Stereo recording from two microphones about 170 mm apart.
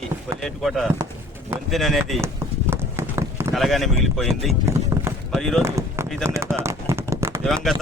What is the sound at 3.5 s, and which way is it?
Speech, centre (ahead or behind).